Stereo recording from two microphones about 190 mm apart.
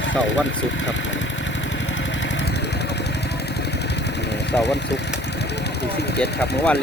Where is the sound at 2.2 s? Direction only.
70° left (ahead or behind).